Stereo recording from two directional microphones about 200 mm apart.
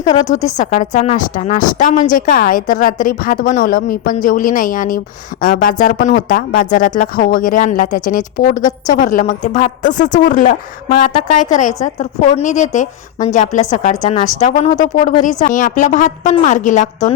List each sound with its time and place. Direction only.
0.0 s a woman's voice: 20° left (ahead or behind)
0.4 s a woman's voice: 40° left (ahead or behind)